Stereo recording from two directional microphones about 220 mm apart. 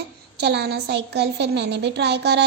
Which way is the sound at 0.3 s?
50° right (ahead or behind).